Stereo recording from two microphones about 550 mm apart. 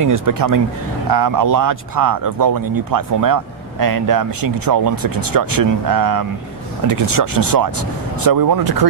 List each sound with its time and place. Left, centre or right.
0.0 s speech: right